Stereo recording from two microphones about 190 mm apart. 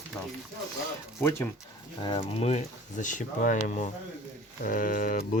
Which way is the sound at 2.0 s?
25° left (ahead or behind).